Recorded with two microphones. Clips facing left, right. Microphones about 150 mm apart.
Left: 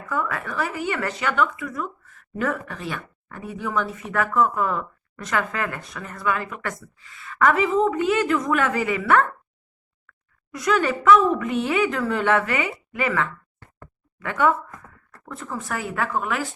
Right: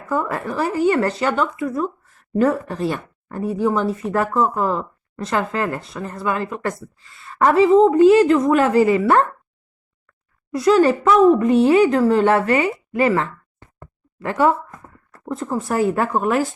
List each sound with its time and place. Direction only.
0.1 s speech: 35° right (ahead or behind)
10.5 s speech: 30° right (ahead or behind)